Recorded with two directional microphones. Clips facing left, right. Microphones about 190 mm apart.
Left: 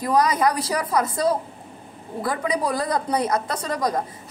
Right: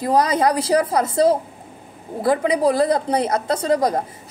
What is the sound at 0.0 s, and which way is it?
A woman's voice, 30° right (ahead or behind).